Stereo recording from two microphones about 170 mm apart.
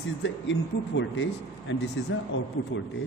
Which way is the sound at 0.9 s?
90° left.